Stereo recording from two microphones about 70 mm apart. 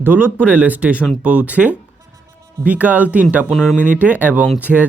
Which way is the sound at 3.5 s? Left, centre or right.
Centre.